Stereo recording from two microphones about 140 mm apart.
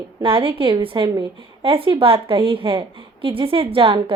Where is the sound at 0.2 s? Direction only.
40° right (ahead or behind).